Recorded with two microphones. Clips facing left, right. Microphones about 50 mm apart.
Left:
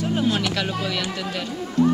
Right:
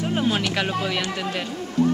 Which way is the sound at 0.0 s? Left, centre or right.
Centre.